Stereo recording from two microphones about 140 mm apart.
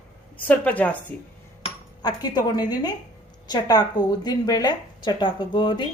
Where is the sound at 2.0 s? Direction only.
30° left (ahead or behind).